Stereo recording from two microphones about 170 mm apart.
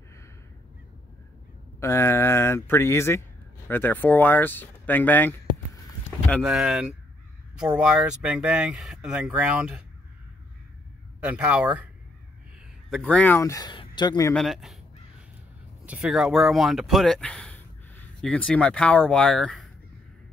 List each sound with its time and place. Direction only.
1.8 s speech: 15° left (ahead or behind)
6.0 s a sound: 10° left (ahead or behind)
6.4 s speech: centre (ahead or behind)
11.1 s speech: 5° right (ahead or behind)
13.1 s speech: 10° left (ahead or behind)
14.3 s speech: centre (ahead or behind)
15.8 s speech: 5° right (ahead or behind)